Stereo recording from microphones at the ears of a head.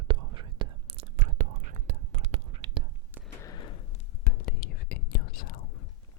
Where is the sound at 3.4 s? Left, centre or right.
Left.